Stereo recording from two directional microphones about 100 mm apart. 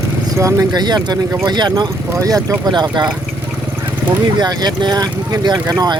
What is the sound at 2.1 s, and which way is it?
Speech, 35° right (ahead or behind).